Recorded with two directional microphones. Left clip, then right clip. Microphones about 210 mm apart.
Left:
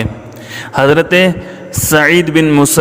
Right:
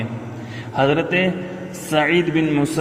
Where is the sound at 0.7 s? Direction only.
50° left (ahead or behind).